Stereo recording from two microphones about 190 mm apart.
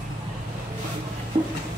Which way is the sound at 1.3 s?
25° right (ahead or behind).